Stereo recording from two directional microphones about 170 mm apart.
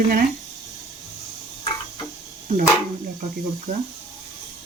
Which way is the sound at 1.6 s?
25° left (ahead or behind).